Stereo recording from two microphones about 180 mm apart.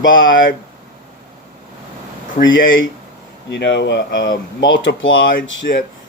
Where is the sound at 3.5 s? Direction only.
75° left (ahead or behind).